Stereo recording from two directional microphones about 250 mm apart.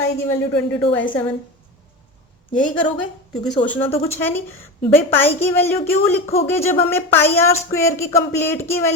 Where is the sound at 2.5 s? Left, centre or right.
Centre.